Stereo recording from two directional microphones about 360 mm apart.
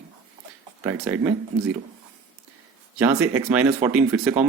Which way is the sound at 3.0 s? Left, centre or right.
Centre.